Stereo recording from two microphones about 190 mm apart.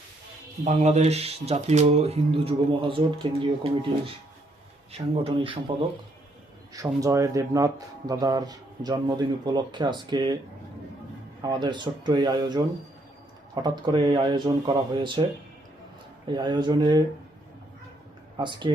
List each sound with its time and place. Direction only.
0.6 s speech: 40° right (ahead or behind)
4.9 s speech: 30° right (ahead or behind)
6.7 s speech: 15° right (ahead or behind)
11.4 s speech: 25° right (ahead or behind)
16.2 s speech: 25° right (ahead or behind)
18.3 s speech: 25° right (ahead or behind)